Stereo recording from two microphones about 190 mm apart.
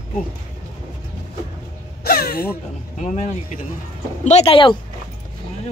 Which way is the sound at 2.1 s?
55° left (ahead or behind).